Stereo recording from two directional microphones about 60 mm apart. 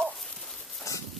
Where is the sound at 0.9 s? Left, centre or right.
Left.